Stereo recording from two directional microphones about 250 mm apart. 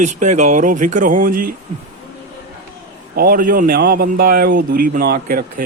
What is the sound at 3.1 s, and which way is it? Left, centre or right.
Speech, right.